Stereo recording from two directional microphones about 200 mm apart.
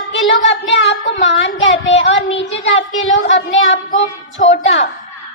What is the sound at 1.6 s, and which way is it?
Speech, 70° left (ahead or behind).